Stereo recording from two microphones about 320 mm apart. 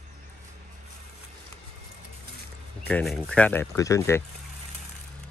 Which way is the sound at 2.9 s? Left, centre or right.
Centre.